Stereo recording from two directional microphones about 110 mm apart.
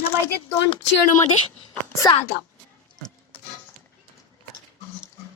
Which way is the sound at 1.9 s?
30° left (ahead or behind).